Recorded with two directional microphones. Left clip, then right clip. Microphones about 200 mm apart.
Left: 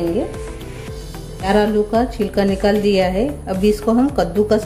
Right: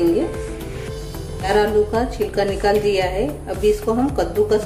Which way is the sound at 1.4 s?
35° left (ahead or behind).